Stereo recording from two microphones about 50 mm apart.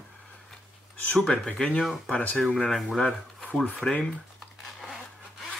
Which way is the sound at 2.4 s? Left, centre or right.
Centre.